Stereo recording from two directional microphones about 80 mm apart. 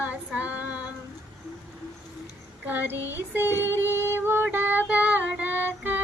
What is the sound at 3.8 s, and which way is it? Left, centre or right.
Female singing, right.